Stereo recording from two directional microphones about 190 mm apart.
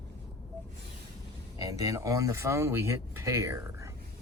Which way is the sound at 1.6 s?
20° right (ahead or behind).